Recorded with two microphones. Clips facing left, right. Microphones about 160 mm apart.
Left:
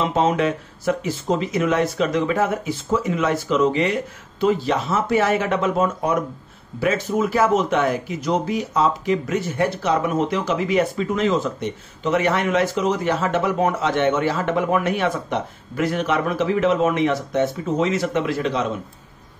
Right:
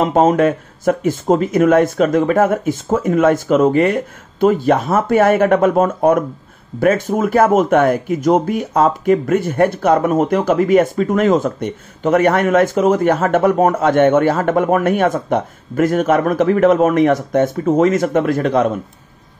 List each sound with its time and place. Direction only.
0.0 s speech: 50° right (ahead or behind)